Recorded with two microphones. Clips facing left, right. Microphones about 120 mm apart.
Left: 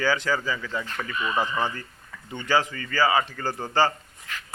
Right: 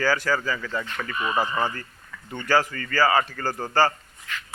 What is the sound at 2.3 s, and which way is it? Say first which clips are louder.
A man's voice: right 1 dB; 15° left (ahead or behind).